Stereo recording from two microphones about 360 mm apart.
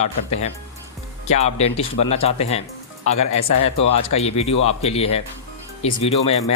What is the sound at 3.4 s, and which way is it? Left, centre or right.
Speech, left.